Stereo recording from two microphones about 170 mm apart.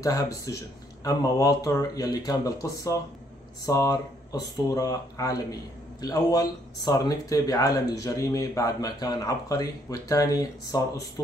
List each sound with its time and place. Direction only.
0.0 s speech: 20° left (ahead or behind)